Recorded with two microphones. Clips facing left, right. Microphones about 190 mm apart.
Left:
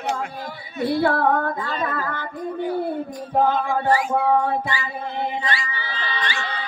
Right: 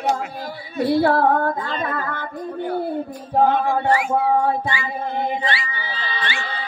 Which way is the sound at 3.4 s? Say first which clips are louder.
Right 2 dB; 65° right (ahead or behind).